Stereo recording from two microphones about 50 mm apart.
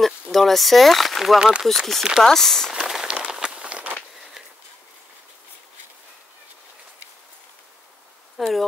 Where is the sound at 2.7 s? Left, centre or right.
Centre.